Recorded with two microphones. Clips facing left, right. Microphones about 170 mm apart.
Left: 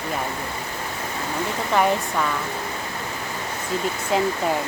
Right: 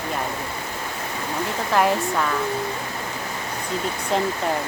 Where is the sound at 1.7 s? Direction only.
Centre (ahead or behind).